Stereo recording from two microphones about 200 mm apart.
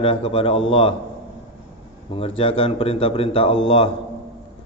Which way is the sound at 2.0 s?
30° left (ahead or behind).